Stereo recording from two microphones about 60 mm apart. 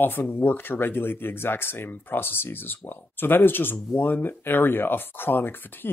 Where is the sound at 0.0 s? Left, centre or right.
Left.